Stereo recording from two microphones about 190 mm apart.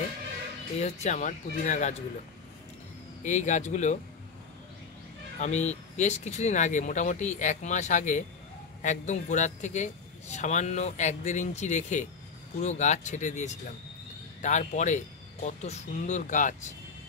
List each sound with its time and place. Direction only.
0.7 s a man's voice: 35° left (ahead or behind)
3.3 s a man's voice: 40° left (ahead or behind)
5.4 s a man's voice: 35° left (ahead or behind)